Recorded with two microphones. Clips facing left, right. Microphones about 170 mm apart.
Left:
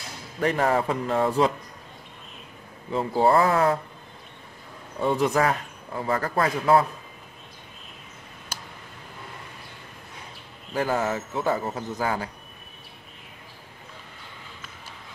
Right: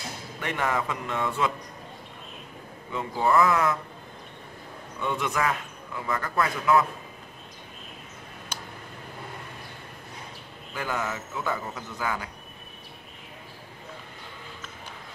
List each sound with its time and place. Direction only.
0.4 s a man's voice: 35° left (ahead or behind)
2.9 s a man's voice: 35° left (ahead or behind)
5.0 s a man's voice: 35° left (ahead or behind)
10.7 s a man's voice: 35° left (ahead or behind)